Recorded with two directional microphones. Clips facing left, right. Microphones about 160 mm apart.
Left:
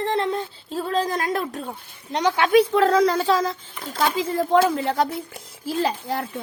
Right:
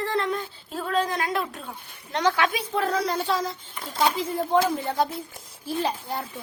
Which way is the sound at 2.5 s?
75° left (ahead or behind).